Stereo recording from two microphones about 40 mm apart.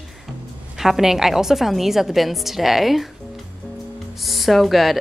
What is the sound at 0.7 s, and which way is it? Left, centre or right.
A woman's voice, centre.